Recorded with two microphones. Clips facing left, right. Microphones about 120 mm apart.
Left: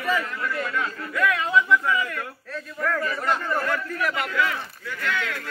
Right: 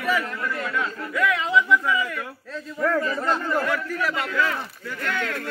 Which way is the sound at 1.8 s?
10° right (ahead or behind).